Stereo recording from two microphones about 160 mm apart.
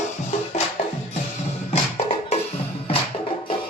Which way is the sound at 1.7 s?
40° left (ahead or behind).